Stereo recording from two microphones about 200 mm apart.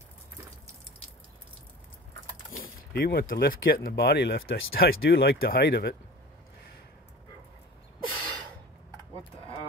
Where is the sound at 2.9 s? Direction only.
50° left (ahead or behind).